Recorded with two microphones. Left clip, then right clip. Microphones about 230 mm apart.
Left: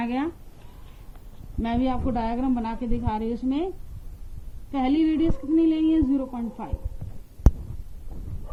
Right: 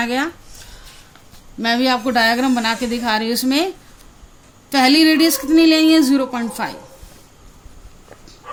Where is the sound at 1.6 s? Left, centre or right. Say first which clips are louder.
Right 10 dB; right.